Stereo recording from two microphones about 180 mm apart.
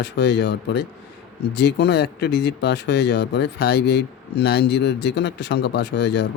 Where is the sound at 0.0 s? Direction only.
70° left (ahead or behind).